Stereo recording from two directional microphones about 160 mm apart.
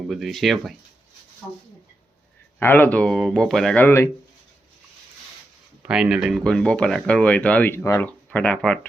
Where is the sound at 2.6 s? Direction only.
15° left (ahead or behind).